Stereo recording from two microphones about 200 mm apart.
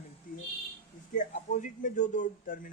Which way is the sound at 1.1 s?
40° left (ahead or behind).